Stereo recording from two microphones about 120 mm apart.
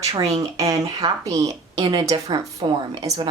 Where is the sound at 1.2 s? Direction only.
30° right (ahead or behind).